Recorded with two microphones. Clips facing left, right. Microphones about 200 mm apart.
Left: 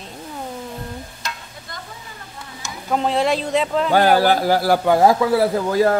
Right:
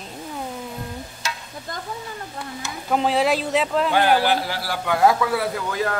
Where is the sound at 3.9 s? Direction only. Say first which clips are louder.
Left 5 dB; 40° left (ahead or behind).